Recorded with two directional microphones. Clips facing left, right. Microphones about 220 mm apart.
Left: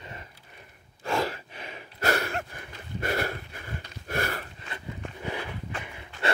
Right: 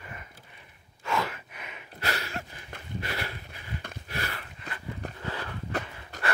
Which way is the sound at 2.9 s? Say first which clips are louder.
Left 7 dB; 50° left (ahead or behind).